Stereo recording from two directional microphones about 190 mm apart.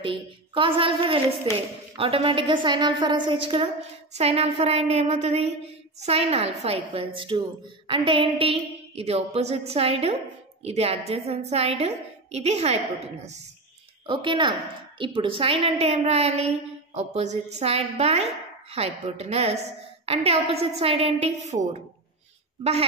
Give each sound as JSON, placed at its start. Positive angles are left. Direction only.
{"t": 0.0, "sound": "a woman's voice", "side_deg": -30}